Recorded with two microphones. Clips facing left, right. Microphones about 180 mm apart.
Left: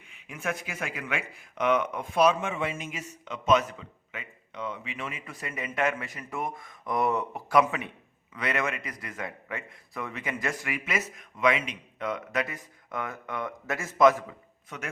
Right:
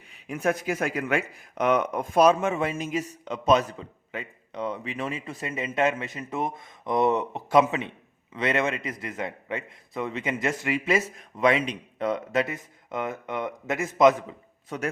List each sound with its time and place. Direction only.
0.1 s a man's voice: 35° right (ahead or behind); by 14.3 s 20° right (ahead or behind)
14.7 s speech: 35° right (ahead or behind)